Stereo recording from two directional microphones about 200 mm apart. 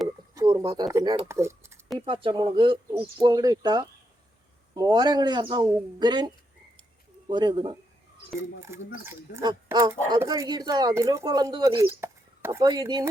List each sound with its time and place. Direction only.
0.3 s speech: 15° right (ahead or behind)
2.0 s speech: 25° right (ahead or behind)